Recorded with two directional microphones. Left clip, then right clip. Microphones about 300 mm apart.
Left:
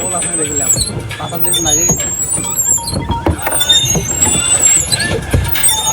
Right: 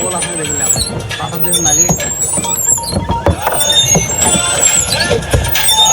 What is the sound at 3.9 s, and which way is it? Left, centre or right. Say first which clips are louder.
Vehicle: right 3 dB; centre.